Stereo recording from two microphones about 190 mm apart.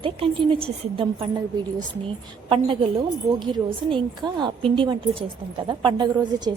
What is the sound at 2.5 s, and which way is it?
A woman's voice, 30° right (ahead or behind).